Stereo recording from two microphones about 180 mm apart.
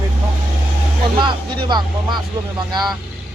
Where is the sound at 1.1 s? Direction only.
25° right (ahead or behind).